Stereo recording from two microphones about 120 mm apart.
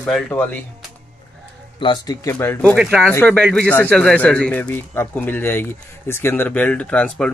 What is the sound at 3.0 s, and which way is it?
Speech, 10° left (ahead or behind).